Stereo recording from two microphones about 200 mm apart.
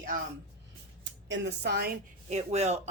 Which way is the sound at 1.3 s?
60° right (ahead or behind).